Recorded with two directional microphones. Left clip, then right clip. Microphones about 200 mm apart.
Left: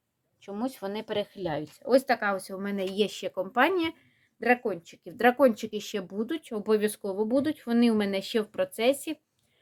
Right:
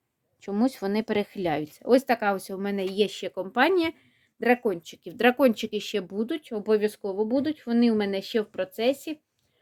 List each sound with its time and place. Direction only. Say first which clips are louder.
0.4 s speech: right 6 dB; 50° right (ahead or behind); by 9.1 s 15° right (ahead or behind)